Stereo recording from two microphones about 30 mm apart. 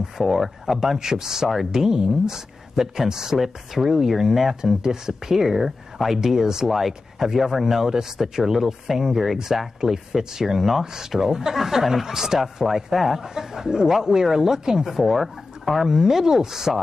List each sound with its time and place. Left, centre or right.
0.2 s speech: centre
0.9 s speech: centre
4.6 s speech: right; by 13.2 s centre
13.2 s speech: centre
15.9 s speech: centre